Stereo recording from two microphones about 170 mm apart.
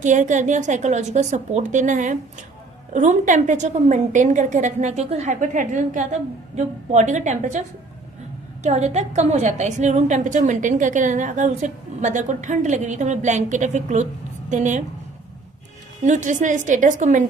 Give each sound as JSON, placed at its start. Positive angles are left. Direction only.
{"t": 0.0, "sound": "a woman's voice", "side_deg": -45}
{"t": 8.6, "sound": "a woman's voice", "side_deg": -40}
{"t": 16.0, "sound": "a woman's voice", "side_deg": -45}